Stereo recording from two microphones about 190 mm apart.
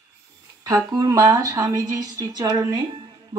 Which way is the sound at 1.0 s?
15° right (ahead or behind).